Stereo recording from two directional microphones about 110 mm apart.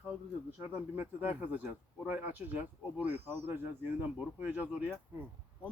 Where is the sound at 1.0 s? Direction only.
15° right (ahead or behind).